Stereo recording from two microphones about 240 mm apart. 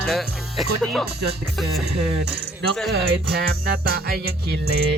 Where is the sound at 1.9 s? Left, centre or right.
Right.